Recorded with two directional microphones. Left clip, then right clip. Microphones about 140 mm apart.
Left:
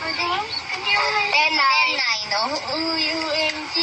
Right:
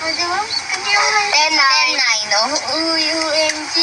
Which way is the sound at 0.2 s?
25° right (ahead or behind).